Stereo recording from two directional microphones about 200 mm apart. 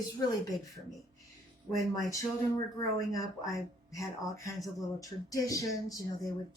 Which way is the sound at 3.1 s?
15° left (ahead or behind).